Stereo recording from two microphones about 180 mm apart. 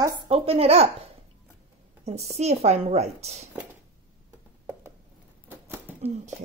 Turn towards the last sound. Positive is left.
turn(degrees=-10)  # may be behind; listen again after turning